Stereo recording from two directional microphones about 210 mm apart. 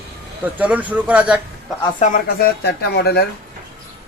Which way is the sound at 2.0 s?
45° left (ahead or behind).